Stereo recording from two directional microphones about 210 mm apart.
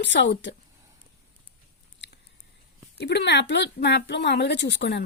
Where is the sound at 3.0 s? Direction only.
55° left (ahead or behind).